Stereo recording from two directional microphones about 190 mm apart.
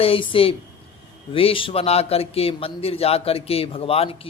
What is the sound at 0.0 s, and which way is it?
A man's voice, 30° left (ahead or behind).